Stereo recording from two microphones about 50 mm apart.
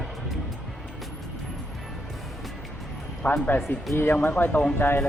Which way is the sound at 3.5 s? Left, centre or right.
Left.